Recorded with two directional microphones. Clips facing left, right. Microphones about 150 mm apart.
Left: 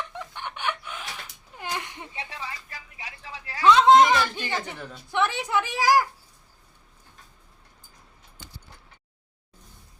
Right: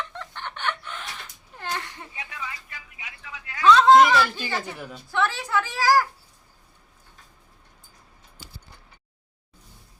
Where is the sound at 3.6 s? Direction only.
20° left (ahead or behind).